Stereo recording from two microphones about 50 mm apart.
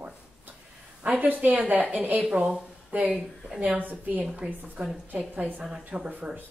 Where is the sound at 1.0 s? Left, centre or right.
Right.